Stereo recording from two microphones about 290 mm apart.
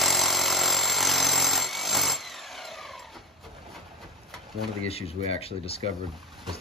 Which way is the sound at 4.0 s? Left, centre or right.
Centre.